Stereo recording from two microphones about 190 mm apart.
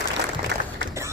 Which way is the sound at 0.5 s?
65° right (ahead or behind).